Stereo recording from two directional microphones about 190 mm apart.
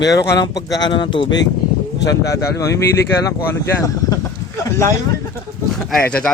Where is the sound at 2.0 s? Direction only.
65° left (ahead or behind).